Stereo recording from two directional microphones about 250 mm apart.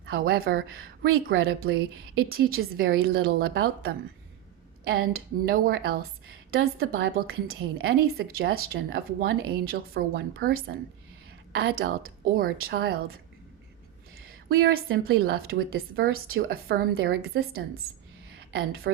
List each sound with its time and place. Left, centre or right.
0.0 s speech: right
1.1 s speech: right
6.9 s a woman's voice: right
7.4 s speech: right
11.8 s speech: right
14.2 s a woman's voice: right